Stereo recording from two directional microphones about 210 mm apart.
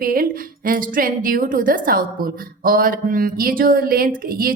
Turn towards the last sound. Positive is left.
turn(degrees=-45)  # may be behind; listen again after turning